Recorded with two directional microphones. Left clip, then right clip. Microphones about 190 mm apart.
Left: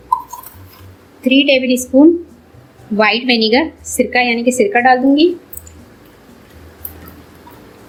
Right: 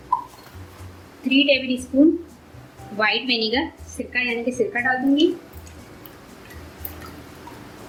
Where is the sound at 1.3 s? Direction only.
35° left (ahead or behind).